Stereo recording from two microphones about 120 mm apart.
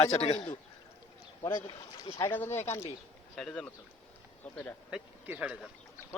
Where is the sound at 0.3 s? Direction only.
40° left (ahead or behind).